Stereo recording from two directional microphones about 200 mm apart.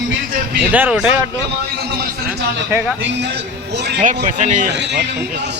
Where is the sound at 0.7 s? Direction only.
5° right (ahead or behind).